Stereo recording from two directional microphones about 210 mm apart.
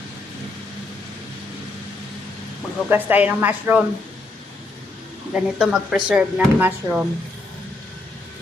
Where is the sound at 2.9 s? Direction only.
10° right (ahead or behind).